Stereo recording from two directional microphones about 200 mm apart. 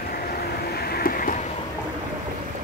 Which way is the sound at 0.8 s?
50° left (ahead or behind).